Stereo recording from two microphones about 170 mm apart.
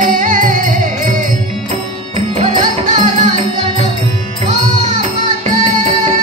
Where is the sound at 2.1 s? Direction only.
40° right (ahead or behind).